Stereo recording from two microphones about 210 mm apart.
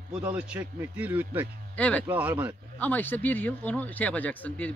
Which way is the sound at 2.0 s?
10° right (ahead or behind).